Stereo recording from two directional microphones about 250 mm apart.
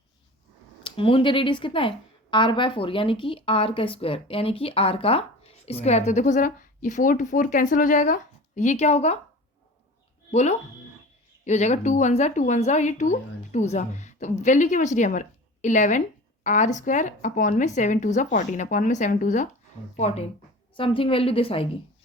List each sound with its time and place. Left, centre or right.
0.8 s a woman's voice: centre
10.3 s a woman's voice: left